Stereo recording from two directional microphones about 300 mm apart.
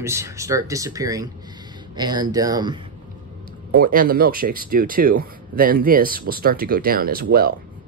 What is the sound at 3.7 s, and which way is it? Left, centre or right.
Speech, right.